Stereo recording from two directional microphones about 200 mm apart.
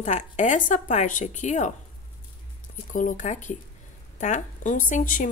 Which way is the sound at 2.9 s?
40° left (ahead or behind).